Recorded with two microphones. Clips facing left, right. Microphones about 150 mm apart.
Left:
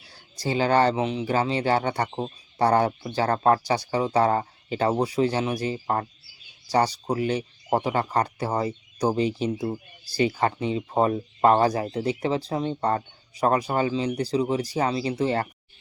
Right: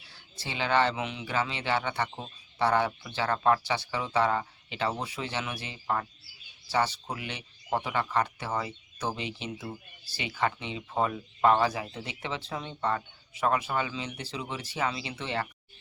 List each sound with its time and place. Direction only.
0.0 s speech: 40° left (ahead or behind)